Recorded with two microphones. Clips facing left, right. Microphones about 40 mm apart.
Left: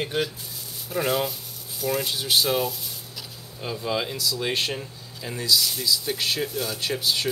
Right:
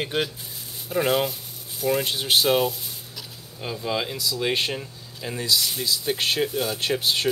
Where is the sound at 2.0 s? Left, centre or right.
Right.